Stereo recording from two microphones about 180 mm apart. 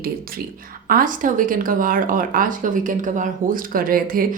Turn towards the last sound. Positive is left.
turn(degrees=-50)  # may be behind; listen again after turning